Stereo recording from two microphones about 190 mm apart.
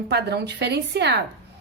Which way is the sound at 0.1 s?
60° right (ahead or behind).